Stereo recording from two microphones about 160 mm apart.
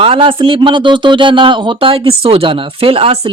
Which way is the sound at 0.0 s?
35° right (ahead or behind).